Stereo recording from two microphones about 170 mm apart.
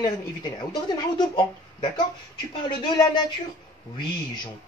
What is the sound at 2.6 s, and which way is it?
Speech, 25° left (ahead or behind).